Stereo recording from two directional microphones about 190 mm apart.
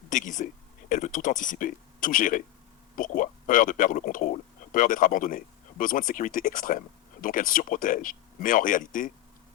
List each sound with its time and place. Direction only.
0.1 s speech: 40° left (ahead or behind)